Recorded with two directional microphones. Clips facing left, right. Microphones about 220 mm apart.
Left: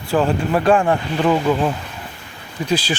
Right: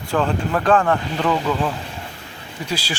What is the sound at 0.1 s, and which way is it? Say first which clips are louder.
Speech: left 3 dB; 10° left (ahead or behind).